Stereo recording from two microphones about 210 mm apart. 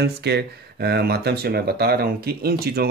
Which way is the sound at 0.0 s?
50° right (ahead or behind).